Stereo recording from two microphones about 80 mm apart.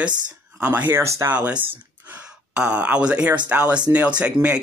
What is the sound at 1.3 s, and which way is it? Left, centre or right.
Speech, centre.